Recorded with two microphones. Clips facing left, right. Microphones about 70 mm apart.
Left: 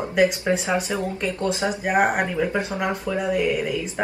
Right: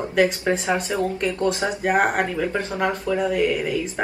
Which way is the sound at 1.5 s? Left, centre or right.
Right.